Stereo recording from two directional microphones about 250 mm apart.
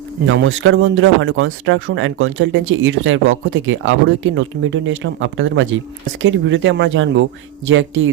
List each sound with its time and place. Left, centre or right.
0.3 s speech: right